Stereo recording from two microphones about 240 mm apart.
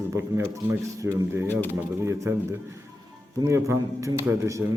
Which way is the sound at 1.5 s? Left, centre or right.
Centre.